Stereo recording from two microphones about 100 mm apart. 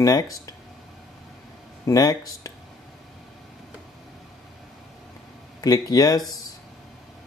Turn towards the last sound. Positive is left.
turn(degrees=40)  # may be behind; listen again after turning